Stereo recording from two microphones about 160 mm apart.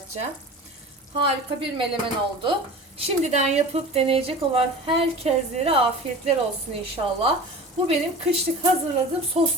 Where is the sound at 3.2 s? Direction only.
45° right (ahead or behind).